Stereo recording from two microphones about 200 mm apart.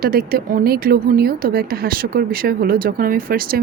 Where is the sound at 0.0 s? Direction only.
50° right (ahead or behind).